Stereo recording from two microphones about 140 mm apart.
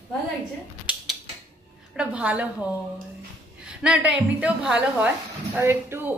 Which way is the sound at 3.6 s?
5° right (ahead or behind).